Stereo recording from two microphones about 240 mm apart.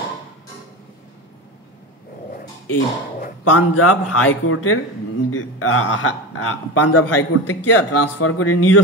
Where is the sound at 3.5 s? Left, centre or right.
Left.